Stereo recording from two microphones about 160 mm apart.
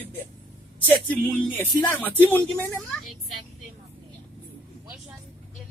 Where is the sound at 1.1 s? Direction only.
10° left (ahead or behind).